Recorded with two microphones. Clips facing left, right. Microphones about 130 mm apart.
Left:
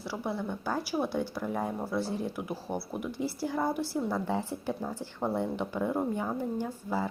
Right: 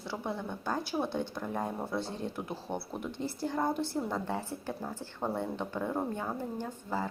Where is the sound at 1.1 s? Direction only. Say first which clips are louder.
Left 2 dB; 20° right (ahead or behind).